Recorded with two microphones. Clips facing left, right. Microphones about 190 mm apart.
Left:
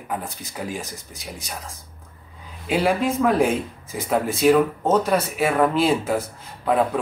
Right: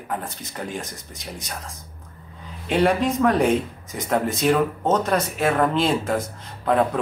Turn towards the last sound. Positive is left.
turn(degrees=5)  # may be behind; listen again after turning